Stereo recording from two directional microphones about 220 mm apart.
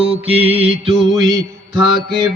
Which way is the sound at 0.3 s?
25° right (ahead or behind).